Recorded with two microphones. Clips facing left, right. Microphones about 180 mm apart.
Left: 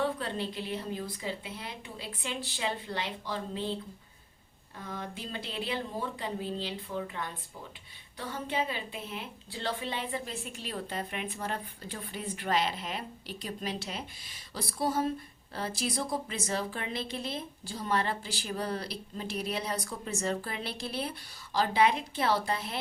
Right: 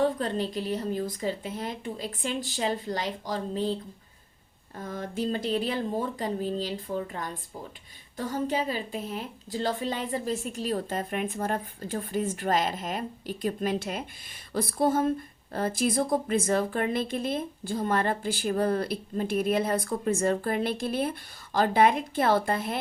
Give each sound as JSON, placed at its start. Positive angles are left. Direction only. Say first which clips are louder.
{"t": 0.0, "sound": "a woman's voice", "louder": "right 6 dB", "side_deg": -40}
{"t": 4.8, "sound": "a woman's voice", "louder": "right 8 dB", "side_deg": -45}